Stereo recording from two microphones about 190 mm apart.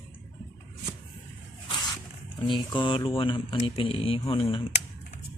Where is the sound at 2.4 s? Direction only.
25° left (ahead or behind).